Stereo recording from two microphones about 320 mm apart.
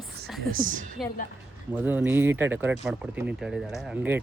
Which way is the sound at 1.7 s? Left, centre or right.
Centre.